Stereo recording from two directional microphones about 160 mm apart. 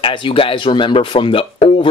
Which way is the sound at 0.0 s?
30° left (ahead or behind).